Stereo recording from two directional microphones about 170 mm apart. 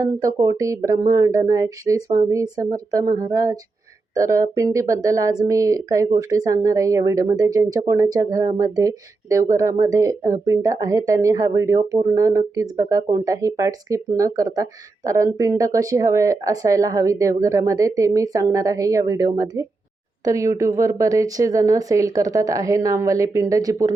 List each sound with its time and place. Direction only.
0.0 s speech: 20° right (ahead or behind)